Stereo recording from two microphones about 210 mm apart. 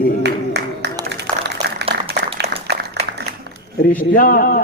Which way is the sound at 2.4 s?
50° right (ahead or behind).